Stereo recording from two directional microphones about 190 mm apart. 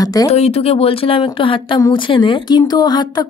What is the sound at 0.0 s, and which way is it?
Speech, 20° left (ahead or behind).